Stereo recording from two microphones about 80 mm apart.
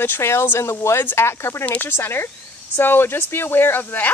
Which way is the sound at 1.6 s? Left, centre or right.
Left.